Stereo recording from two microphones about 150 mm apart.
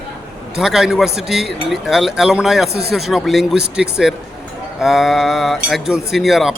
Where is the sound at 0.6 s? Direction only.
5° right (ahead or behind).